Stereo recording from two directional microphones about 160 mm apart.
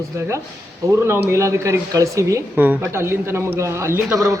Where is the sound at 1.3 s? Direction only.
15° right (ahead or behind).